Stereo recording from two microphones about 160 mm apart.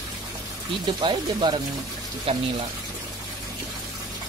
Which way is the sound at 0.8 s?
30° right (ahead or behind).